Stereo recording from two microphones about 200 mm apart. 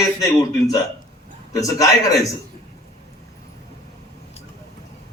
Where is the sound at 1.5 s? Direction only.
15° left (ahead or behind).